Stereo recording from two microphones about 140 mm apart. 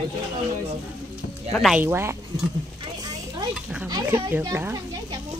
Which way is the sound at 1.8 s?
15° right (ahead or behind).